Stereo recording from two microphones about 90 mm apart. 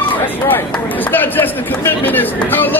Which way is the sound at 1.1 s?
20° left (ahead or behind).